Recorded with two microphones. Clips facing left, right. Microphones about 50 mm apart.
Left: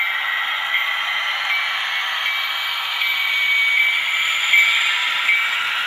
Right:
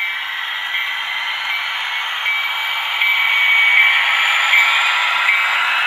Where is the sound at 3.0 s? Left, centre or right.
Right.